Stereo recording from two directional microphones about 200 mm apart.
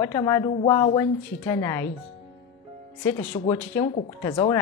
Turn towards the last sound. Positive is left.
turn(degrees=20)  # may be behind; listen again after turning